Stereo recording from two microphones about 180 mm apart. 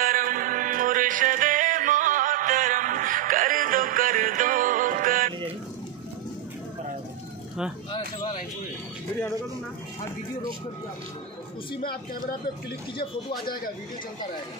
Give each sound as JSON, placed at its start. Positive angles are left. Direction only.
{"t": 0.0, "sound": "music", "side_deg": -50}